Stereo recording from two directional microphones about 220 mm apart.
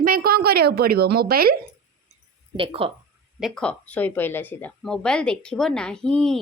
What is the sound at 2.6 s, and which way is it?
Speech, 25° right (ahead or behind).